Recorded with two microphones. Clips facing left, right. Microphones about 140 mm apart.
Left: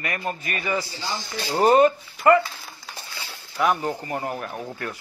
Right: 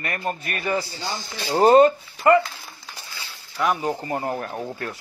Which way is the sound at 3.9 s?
25° right (ahead or behind).